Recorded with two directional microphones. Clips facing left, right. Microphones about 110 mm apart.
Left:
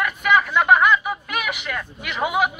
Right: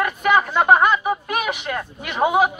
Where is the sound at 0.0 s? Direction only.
35° right (ahead or behind).